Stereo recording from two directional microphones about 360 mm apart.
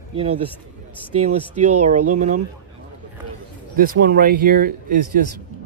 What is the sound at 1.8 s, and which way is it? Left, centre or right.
Speech, centre.